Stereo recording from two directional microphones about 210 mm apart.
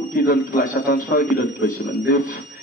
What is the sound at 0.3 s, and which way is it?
Speech, 40° left (ahead or behind).